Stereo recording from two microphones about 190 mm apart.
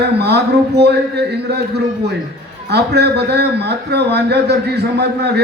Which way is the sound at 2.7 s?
60° right (ahead or behind).